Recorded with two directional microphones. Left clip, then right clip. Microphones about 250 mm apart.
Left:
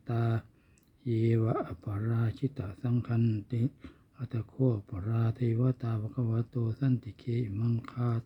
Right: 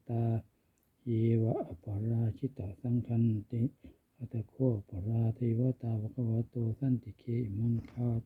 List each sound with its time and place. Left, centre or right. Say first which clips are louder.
0.1 s a sound: left 3 dB; centre
1.0 s speech: left 2 dB; centre
1.4 s speech: left 2 dB; left
2.0 s speech: left 2 dB; centre